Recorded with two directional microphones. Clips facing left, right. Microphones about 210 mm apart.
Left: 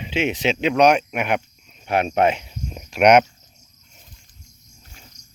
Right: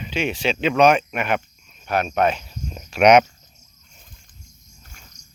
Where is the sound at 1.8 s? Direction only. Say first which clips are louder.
Left 2 dB; 25° left (ahead or behind).